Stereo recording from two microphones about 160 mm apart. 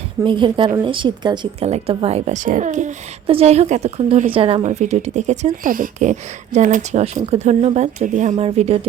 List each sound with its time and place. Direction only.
0.3 s speech: 30° right (ahead or behind); by 2.9 s 50° right (ahead or behind)
3.2 s speech: 40° right (ahead or behind)
4.6 s speech: 45° right (ahead or behind)